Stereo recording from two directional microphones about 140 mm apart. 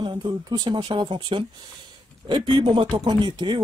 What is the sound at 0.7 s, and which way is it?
Speech, 35° right (ahead or behind).